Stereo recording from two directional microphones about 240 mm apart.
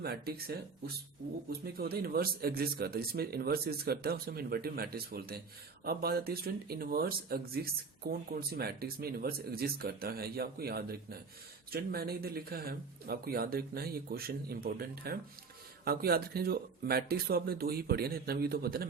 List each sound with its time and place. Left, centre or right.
0.0 s speech: right
1.6 s speech: right